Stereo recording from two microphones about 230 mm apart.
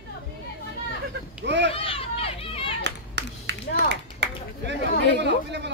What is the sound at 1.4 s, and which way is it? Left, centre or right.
Speech, right.